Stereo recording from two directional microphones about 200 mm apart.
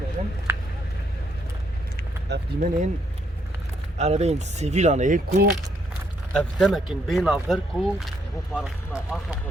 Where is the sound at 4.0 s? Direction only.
35° right (ahead or behind).